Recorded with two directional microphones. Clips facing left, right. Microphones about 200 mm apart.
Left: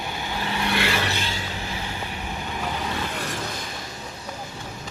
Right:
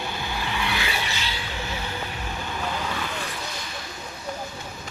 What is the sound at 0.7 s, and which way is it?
Vehicle, 70° left (ahead or behind).